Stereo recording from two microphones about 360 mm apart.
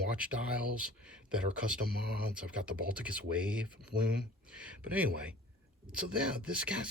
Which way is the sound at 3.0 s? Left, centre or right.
Centre.